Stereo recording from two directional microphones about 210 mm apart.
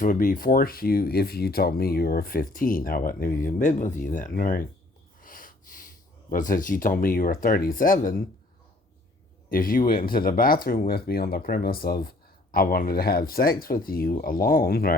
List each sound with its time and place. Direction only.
0.0 s speech: 40° left (ahead or behind)
9.5 s speech: 40° left (ahead or behind)